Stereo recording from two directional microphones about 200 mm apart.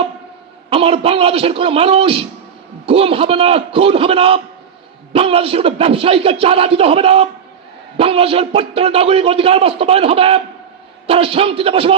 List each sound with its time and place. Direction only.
0.7 s a man's voice: 30° right (ahead or behind)